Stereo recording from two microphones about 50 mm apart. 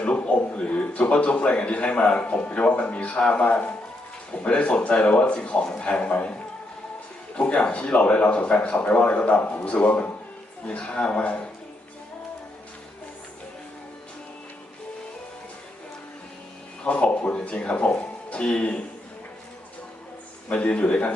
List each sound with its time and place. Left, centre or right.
0.0 s a man's voice: left
7.4 s a man's voice: left
16.8 s a man's voice: left
20.5 s a man's voice: left